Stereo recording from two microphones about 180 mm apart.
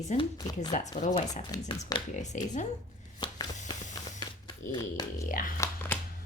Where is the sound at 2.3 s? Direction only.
45° left (ahead or behind).